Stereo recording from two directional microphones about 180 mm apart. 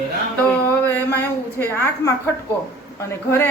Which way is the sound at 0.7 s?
10° left (ahead or behind).